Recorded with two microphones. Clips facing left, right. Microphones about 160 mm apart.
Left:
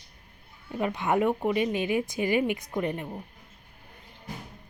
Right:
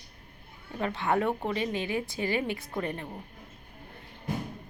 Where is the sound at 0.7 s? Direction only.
15° left (ahead or behind).